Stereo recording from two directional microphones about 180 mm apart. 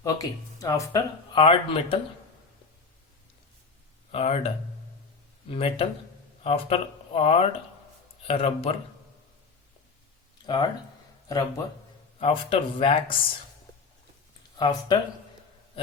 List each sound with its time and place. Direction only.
0.0 s speech: 20° left (ahead or behind)
1.3 s speech: 30° left (ahead or behind)
4.1 s speech: 35° left (ahead or behind)
10.4 s speech: 25° left (ahead or behind)
12.2 s speech: 30° left (ahead or behind)
14.6 s speech: 25° left (ahead or behind)